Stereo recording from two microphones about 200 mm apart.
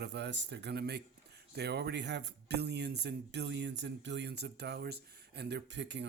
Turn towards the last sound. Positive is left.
turn(degrees=-60)  # may be behind; listen again after turning